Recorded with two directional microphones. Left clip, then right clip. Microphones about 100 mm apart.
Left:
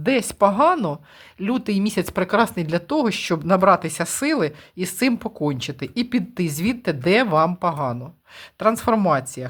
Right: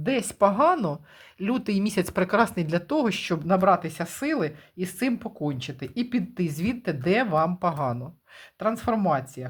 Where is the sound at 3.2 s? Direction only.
35° left (ahead or behind).